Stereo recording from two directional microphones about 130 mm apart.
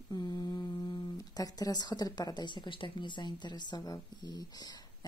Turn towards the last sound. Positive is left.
turn(degrees=30)  # may be behind; listen again after turning